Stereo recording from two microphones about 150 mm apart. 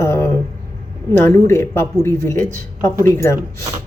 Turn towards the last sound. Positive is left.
turn(degrees=20)  # may be behind; listen again after turning